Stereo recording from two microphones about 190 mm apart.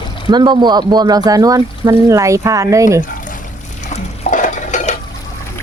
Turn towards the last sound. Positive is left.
turn(degrees=40)  # may be behind; listen again after turning